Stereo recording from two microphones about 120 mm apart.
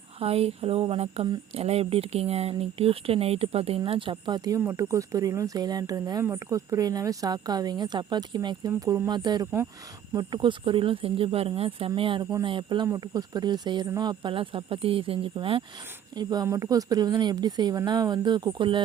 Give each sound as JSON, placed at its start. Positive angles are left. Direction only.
{"t": 0.2, "sound": "speech", "side_deg": -55}
{"t": 3.8, "sound": "a woman's voice", "side_deg": -45}
{"t": 4.6, "sound": "a woman's voice", "side_deg": -25}
{"t": 16.1, "sound": "a woman's voice", "side_deg": -35}